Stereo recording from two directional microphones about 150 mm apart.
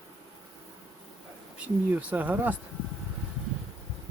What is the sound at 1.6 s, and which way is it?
Speech, 10° right (ahead or behind).